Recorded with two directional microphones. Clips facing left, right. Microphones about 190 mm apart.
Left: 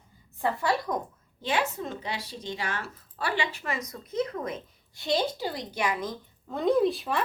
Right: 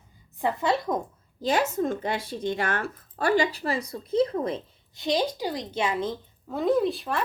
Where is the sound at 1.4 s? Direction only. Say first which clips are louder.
Right 5 dB; 40° right (ahead or behind).